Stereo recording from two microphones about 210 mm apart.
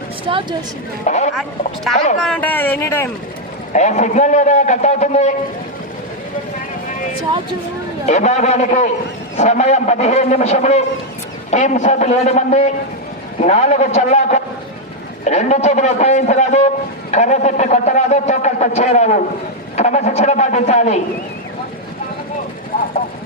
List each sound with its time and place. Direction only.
0.3 s a woman's voice: 25° right (ahead or behind)
1.0 s a man's voice: 35° left (ahead or behind)
2.2 s speech: 5° left (ahead or behind)
3.7 s a man's voice: 35° left (ahead or behind)
8.0 s a man's voice: 35° left (ahead or behind)